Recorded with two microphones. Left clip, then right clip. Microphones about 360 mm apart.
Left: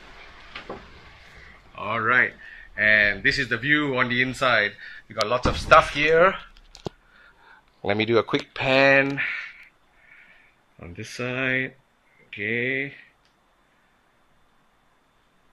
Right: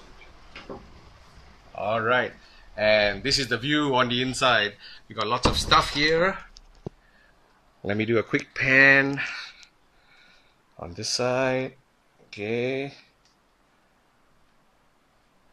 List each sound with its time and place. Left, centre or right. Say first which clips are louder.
1.8 s a sound: left 2 dB; centre
2.7 s speech: left 2 dB; centre
8.0 s speech: left 2 dB; centre
10.8 s speech: right 6 dB; right
12.7 s speech: left 3 dB; centre